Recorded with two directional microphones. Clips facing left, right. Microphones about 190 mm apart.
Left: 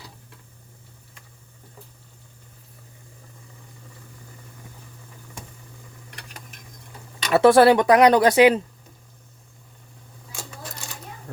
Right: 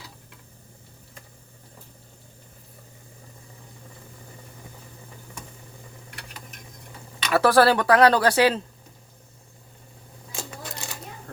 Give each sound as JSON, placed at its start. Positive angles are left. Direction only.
{"t": 7.3, "sound": "speech", "side_deg": 25}